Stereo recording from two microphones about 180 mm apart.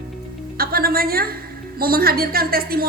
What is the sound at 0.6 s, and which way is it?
A woman's voice, 55° right (ahead or behind).